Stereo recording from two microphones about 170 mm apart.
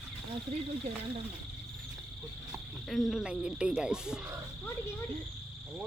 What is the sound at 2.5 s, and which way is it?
Speech, centre (ahead or behind).